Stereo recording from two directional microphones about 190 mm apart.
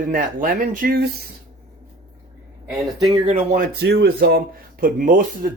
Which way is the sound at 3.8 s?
60° right (ahead or behind).